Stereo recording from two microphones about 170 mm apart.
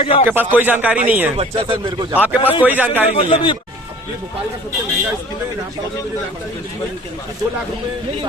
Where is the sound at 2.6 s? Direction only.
10° right (ahead or behind).